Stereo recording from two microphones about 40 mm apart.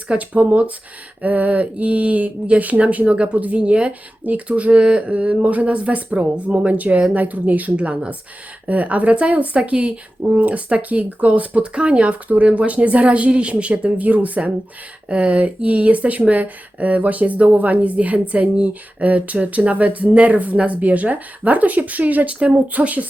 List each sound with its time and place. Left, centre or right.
0.1 s speech: right
22.4 s speech: right
22.7 s speech: right